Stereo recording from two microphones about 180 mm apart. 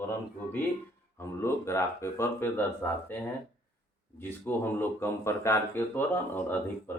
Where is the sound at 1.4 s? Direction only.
15° left (ahead or behind).